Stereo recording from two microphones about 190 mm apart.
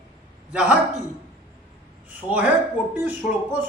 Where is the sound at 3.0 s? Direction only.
10° right (ahead or behind).